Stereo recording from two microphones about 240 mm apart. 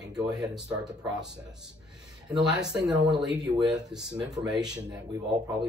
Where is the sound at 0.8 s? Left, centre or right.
Centre.